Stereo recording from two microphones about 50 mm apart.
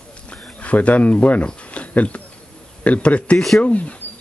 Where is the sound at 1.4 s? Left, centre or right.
Left.